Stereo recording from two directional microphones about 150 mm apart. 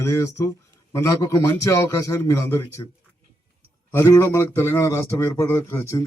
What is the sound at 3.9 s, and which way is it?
A man's voice, 20° left (ahead or behind).